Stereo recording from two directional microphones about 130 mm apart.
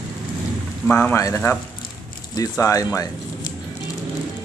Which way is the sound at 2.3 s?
25° left (ahead or behind).